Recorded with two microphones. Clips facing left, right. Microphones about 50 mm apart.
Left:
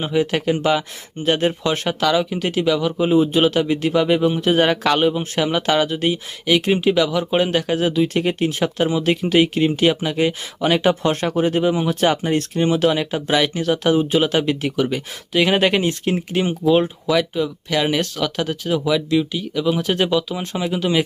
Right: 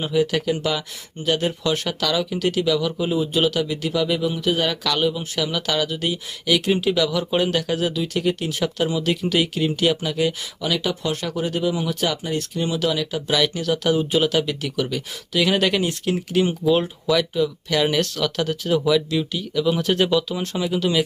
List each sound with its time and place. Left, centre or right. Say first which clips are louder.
0.0 s speech: left 1 dB; left
10.6 s speech: left 7 dB; left